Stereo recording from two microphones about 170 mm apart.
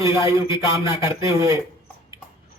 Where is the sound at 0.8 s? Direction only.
20° right (ahead or behind).